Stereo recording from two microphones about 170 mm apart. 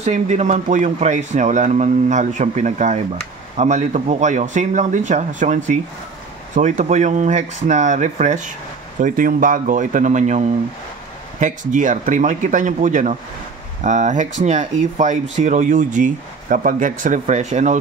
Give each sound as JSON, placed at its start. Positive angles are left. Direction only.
{"t": 0.0, "sound": "speech", "side_deg": -40}